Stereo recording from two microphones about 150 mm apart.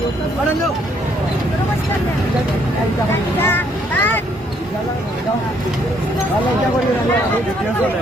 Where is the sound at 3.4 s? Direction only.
15° left (ahead or behind).